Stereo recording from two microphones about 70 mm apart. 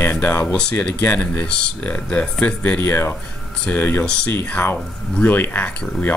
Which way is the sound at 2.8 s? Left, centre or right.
Left.